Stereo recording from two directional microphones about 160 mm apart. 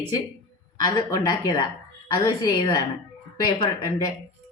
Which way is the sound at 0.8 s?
20° left (ahead or behind).